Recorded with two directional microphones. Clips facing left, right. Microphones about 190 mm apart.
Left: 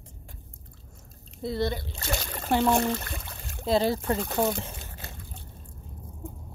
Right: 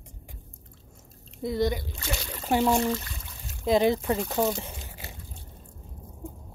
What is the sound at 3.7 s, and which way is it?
Speech, 15° right (ahead or behind).